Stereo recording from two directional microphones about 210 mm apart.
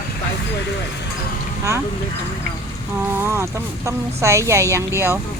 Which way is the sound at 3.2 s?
10° right (ahead or behind).